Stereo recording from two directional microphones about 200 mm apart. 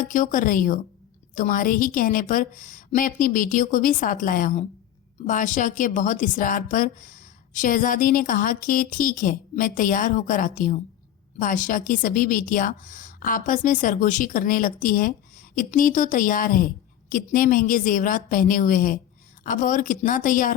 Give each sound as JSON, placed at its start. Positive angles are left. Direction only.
{"t": 0.0, "sound": "a woman's voice", "side_deg": 40}